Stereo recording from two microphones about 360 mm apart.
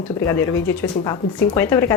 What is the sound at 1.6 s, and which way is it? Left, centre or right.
Speech, centre.